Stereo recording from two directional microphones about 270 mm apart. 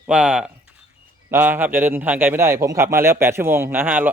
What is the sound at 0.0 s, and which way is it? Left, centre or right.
A man's voice, centre.